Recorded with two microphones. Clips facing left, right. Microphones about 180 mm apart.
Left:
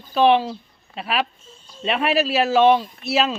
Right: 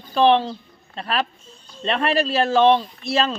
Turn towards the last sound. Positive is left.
turn(degrees=5)  # may be behind; listen again after turning